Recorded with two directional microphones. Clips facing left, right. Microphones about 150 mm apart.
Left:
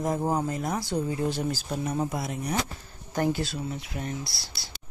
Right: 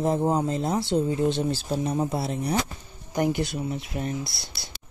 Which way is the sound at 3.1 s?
15° right (ahead or behind).